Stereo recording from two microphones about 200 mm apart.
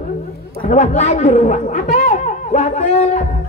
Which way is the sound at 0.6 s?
35° left (ahead or behind).